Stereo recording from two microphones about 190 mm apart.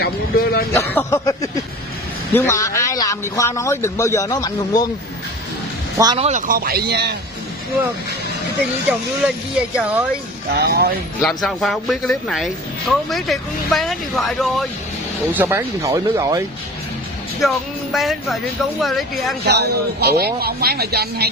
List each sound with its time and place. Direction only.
0.0 s a sound: 55° left (ahead or behind)
0.7 s a man's voice: 10° left (ahead or behind)
6.1 s speech: 35° right (ahead or behind)
6.5 s speech: 50° right (ahead or behind)
8.9 s speech: 5° right (ahead or behind)
10.5 s speech: 60° right (ahead or behind)
11.2 s speech: centre (ahead or behind)
15.3 s speech: 10° right (ahead or behind)
17.4 s speech: centre (ahead or behind)
19.5 s speech: 60° right (ahead or behind)